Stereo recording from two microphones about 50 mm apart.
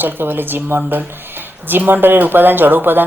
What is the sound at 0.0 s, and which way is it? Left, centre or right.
Speech, right.